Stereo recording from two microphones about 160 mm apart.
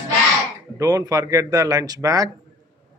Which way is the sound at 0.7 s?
25° right (ahead or behind).